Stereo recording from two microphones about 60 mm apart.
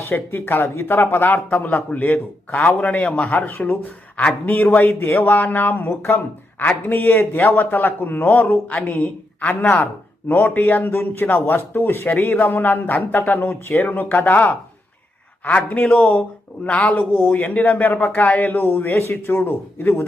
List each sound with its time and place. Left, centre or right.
0.0 s speech: left
5.0 s a man's voice: left
18.9 s a man's voice: left